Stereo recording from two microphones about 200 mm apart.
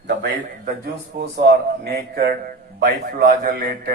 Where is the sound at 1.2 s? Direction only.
55° right (ahead or behind).